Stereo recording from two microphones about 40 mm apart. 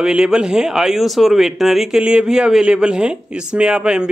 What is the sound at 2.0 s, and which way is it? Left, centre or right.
Speech, right.